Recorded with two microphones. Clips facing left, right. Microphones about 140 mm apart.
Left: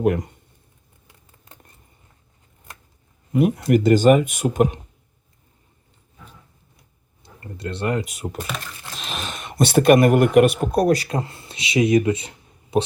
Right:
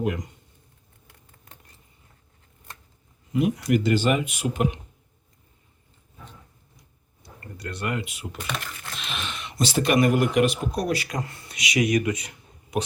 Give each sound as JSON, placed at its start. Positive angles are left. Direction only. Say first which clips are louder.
{"t": 0.0, "sound": "speech", "louder": "left 7 dB", "side_deg": 50}
{"t": 3.3, "sound": "speech", "louder": "left 5 dB", "side_deg": 50}
{"t": 7.2, "sound": "speech", "louder": "left 5 dB", "side_deg": 25}